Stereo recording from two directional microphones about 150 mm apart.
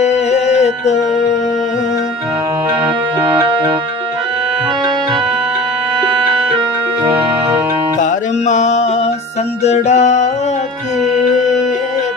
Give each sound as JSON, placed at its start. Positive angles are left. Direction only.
{"t": 0.0, "sound": "music", "side_deg": 50}
{"t": 8.4, "sound": "mantra", "side_deg": 50}
{"t": 9.6, "sound": "music", "side_deg": 50}